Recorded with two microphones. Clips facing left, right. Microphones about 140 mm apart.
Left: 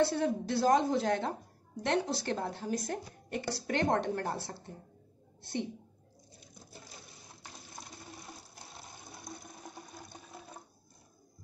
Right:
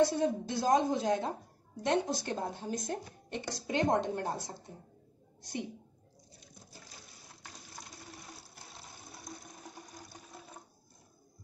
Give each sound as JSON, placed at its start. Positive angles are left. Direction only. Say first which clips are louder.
{"t": 0.0, "sound": "a woman's voice", "louder": "right 1 dB", "side_deg": -15}